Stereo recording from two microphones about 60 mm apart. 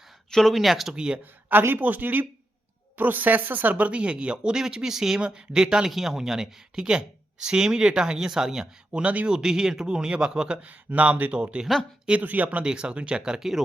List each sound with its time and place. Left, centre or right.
0.3 s speech: centre
0.9 s speech: centre
1.5 s speech: right
12.6 s speech: centre